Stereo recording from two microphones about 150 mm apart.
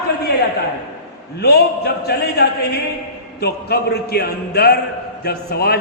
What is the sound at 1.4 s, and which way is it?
A man's voice, 90° left.